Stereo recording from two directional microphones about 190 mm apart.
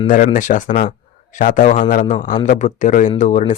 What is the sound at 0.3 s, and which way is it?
Speech, 45° left (ahead or behind).